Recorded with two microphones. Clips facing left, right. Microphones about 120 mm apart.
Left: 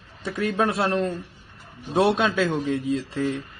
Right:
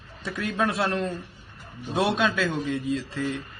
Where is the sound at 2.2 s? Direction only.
35° left (ahead or behind).